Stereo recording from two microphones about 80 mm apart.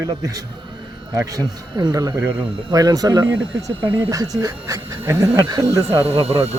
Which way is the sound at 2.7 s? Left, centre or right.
Right.